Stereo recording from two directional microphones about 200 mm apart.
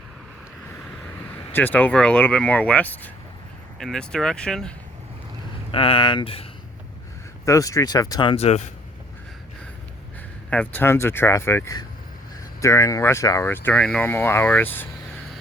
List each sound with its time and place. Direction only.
1.5 s speech: 10° left (ahead or behind)
5.7 s speech: 25° left (ahead or behind)
7.4 s speech: 15° left (ahead or behind); by 8.7 s 35° left (ahead or behind)
10.5 s speech: 10° left (ahead or behind)